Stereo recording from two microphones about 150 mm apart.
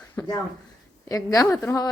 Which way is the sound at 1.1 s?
25° left (ahead or behind).